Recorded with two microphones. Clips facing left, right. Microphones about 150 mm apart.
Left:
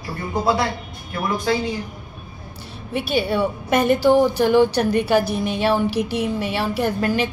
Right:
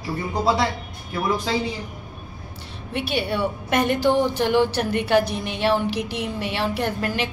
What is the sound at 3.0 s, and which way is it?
A woman's voice, 10° left (ahead or behind).